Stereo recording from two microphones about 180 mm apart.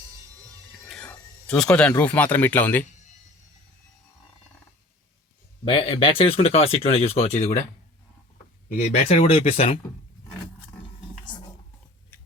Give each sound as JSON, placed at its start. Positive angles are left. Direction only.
{"t": 0.9, "sound": "speech", "side_deg": 5}
{"t": 5.6, "sound": "speech", "side_deg": 30}
{"t": 8.8, "sound": "speech", "side_deg": 35}